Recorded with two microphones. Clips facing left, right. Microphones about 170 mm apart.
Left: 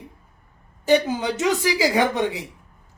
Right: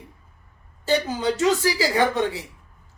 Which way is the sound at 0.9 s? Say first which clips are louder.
Left 3 dB; 15° left (ahead or behind).